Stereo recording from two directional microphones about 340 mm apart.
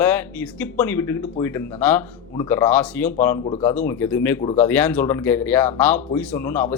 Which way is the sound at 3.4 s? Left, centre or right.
Centre.